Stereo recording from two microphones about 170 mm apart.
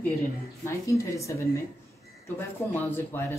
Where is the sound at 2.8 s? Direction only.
10° left (ahead or behind).